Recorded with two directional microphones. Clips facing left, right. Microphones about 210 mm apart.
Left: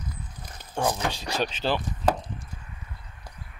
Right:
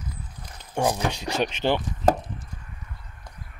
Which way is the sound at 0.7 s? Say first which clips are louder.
Right 3 dB; 15° right (ahead or behind).